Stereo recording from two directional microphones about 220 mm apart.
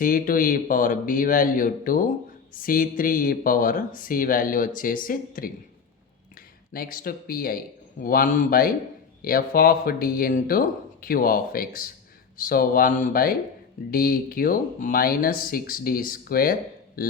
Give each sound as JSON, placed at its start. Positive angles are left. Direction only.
{"t": 0.0, "sound": "speech", "side_deg": 40}
{"t": 6.7, "sound": "speech", "side_deg": 40}